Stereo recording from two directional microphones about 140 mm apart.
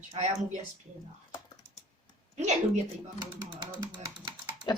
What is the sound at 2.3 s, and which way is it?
Speech, 55° right (ahead or behind).